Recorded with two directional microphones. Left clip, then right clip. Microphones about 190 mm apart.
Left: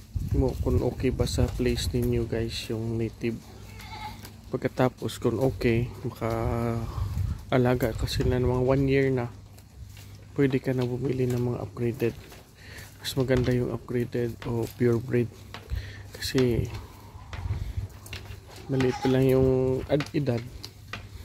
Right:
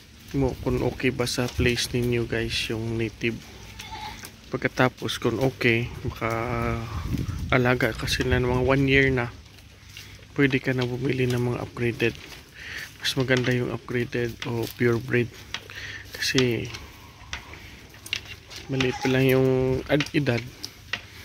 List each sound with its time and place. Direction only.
0.4 s speech: 10° right (ahead or behind)
4.5 s speech: centre (ahead or behind)
10.3 s speech: 5° left (ahead or behind)
15.7 s a sound: 5° left (ahead or behind)
18.9 s speech: 5° left (ahead or behind)